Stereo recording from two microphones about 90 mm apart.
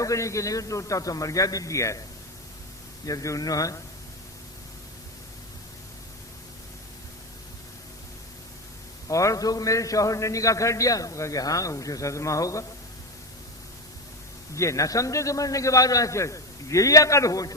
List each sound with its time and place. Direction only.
0.0 s a man's voice: 35° left (ahead or behind)
3.1 s a man's voice: 40° left (ahead or behind)
9.0 s a man's voice: 40° left (ahead or behind)
14.5 s a man's voice: 35° left (ahead or behind)